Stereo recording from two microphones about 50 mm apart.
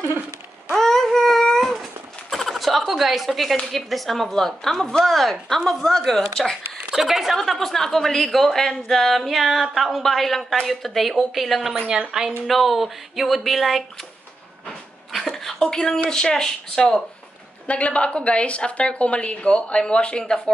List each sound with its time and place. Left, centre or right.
0.7 s a sound: centre
3.7 s a woman's voice: centre
6.9 s a woman's voice: centre
11.9 s a woman's voice: centre
15.1 s a sound: centre
16.1 s speech: centre
17.6 s a woman's voice: left